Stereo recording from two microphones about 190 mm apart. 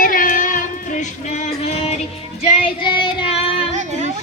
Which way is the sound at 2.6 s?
25° left (ahead or behind).